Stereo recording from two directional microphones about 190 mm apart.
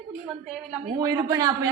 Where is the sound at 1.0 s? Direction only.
20° right (ahead or behind).